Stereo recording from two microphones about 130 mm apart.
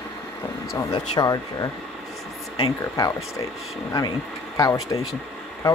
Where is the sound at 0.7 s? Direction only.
30° left (ahead or behind).